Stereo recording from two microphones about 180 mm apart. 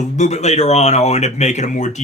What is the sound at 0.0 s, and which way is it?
Speech, 40° left (ahead or behind).